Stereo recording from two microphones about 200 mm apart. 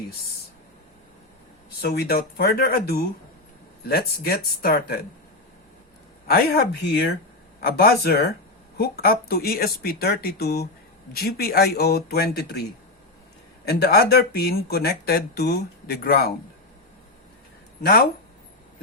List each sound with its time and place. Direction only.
1.7 s speech: 50° left (ahead or behind)
6.2 s speech: 50° left (ahead or behind)
13.7 s speech: 50° left (ahead or behind)